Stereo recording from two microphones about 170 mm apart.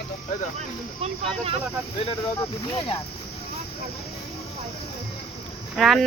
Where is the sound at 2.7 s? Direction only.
30° left (ahead or behind).